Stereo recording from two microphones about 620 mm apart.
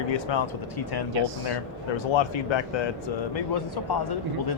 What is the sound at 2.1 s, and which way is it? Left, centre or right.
Speech, left.